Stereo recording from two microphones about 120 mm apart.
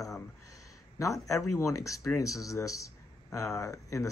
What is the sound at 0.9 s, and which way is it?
Speech, 25° left (ahead or behind).